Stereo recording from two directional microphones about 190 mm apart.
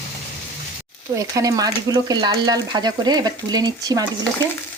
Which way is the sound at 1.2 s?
20° right (ahead or behind).